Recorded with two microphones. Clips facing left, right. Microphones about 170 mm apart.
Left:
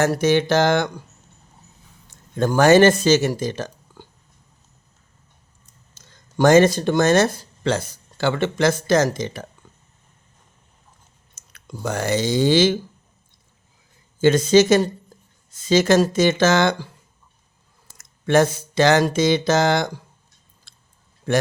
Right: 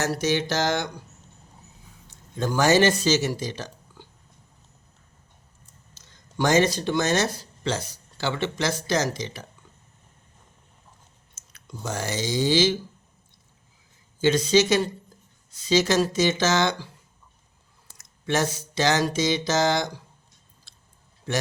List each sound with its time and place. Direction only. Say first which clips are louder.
0.0 s a sound: left 7 dB; 55° left (ahead or behind)
2.0 s speech: left 6 dB; 55° left (ahead or behind)
5.9 s speech: left 4 dB; 50° left (ahead or behind)
11.3 s speech: left 4 dB; 55° left (ahead or behind)
14.2 s speech: left 5 dB; 50° left (ahead or behind)
17.9 s a sound: left 9 dB; 55° left (ahead or behind)
21.3 s speech: left 7 dB; 50° left (ahead or behind)